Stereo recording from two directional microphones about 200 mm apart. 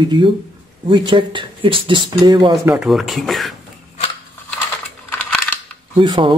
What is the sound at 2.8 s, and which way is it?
Speech, centre (ahead or behind).